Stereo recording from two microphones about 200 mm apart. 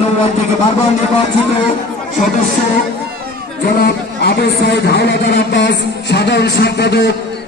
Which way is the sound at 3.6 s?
50° left (ahead or behind).